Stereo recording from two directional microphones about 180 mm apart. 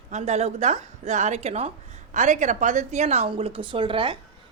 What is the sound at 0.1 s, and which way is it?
A woman's voice, 40° right (ahead or behind).